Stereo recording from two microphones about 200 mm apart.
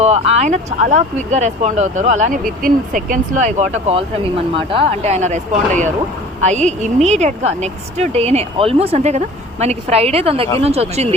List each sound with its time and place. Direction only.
0.0 s speech: 35° right (ahead or behind)